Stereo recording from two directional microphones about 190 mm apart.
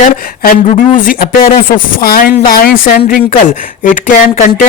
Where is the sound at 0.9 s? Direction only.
50° left (ahead or behind).